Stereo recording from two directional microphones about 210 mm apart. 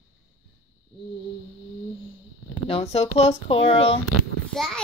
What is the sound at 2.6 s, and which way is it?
Speech, 30° left (ahead or behind).